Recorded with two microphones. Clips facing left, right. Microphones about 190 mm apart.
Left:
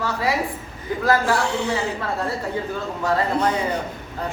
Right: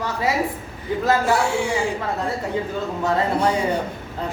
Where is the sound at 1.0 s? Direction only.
20° right (ahead or behind).